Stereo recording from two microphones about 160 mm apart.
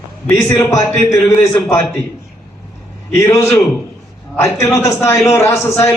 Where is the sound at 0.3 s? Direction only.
20° left (ahead or behind).